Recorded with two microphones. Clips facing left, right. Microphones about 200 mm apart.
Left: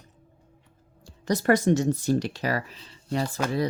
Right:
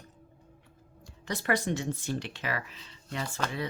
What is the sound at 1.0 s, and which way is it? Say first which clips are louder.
Speech: left 9 dB; 40° left (ahead or behind).